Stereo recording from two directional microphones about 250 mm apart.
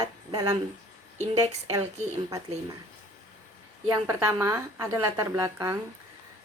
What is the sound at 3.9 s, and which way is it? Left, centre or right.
Speech, centre.